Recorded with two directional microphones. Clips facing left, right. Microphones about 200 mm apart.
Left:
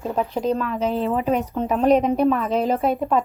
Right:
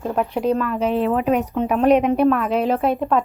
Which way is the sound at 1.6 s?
Centre (ahead or behind).